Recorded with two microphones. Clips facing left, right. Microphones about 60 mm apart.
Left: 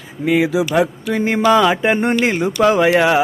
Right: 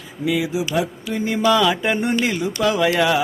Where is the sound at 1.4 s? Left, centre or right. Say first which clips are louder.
Left 4 dB; left.